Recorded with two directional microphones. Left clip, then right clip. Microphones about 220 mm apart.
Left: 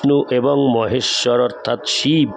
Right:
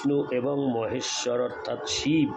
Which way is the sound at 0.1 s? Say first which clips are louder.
Left 11 dB; 50° left (ahead or behind).